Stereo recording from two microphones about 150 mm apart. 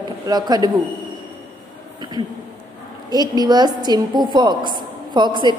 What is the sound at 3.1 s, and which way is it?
A woman's voice, 25° right (ahead or behind).